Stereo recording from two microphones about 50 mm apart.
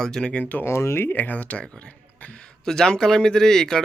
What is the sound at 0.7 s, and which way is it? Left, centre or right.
Speech, left.